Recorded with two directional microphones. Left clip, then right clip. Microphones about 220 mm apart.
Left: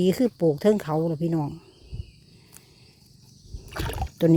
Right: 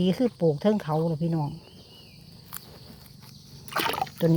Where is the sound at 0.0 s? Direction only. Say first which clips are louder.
Left 2 dB; 45° left (ahead or behind).